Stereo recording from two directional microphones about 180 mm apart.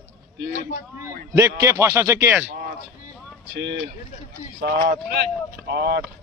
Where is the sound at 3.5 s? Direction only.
70° right (ahead or behind).